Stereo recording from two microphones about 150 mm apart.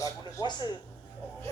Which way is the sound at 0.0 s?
25° left (ahead or behind).